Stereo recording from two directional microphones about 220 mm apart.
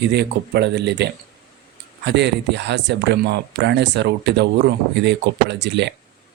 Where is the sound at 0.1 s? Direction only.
50° right (ahead or behind).